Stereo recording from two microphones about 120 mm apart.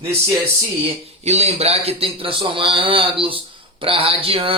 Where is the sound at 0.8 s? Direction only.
65° right (ahead or behind).